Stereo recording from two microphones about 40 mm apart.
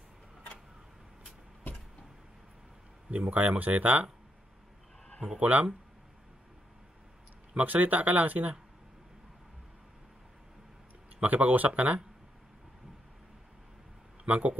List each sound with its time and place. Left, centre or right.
3.1 s speech: right
5.4 s speech: right
7.5 s speech: right
11.1 s speech: right
14.2 s speech: right